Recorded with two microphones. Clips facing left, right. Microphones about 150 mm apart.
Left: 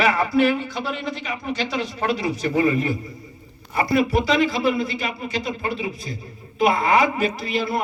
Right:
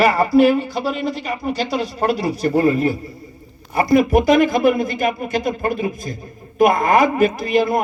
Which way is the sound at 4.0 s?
50° right (ahead or behind).